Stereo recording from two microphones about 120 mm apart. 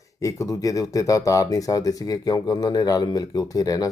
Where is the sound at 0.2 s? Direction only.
25° left (ahead or behind).